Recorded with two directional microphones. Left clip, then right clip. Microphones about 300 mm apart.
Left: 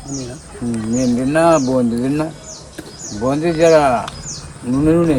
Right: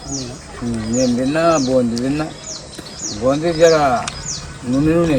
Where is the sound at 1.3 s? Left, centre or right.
Left.